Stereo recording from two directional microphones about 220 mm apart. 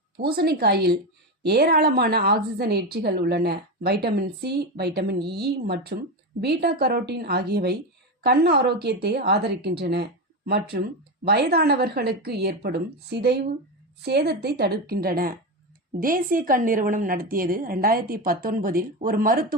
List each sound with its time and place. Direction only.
0.2 s a woman's voice: 45° right (ahead or behind)